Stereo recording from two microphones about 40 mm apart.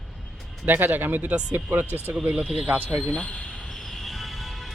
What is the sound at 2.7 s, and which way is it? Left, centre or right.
Speech, right.